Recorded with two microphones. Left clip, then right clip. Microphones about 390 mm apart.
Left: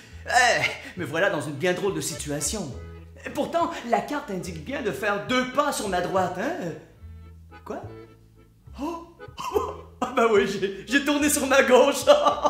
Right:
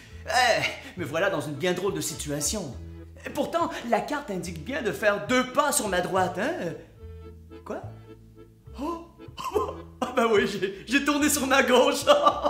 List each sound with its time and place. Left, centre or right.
0.2 s a woman's voice: centre; by 7.8 s right
8.8 s music: right
9.4 s speech: centre